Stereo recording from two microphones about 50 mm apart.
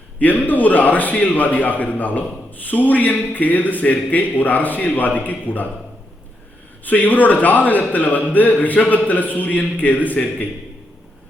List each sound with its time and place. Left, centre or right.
0.2 s a man's voice: left
6.8 s a man's voice: left